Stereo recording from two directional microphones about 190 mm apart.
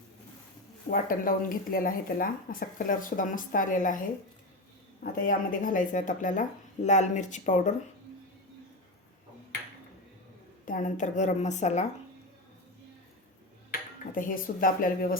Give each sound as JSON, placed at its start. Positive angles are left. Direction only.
{"t": 0.9, "sound": "a woman's voice", "side_deg": 50}
{"t": 5.2, "sound": "a woman's voice", "side_deg": 45}
{"t": 10.7, "sound": "a woman's voice", "side_deg": 40}
{"t": 13.7, "sound": "dishes", "side_deg": 45}